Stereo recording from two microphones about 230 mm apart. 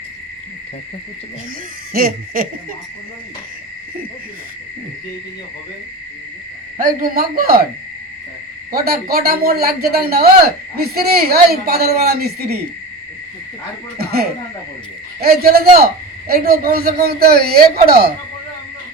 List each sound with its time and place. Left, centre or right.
1.9 s a man's voice: right
6.7 s a man's voice: right
8.7 s a man's voice: right
14.0 s a man's voice: right